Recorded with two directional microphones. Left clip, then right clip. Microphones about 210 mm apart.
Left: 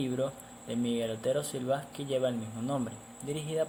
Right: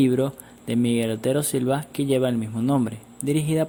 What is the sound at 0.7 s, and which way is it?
Speech, 50° right (ahead or behind).